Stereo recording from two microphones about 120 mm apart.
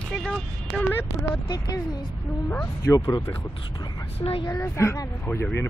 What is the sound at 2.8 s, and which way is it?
Speech, 30° left (ahead or behind).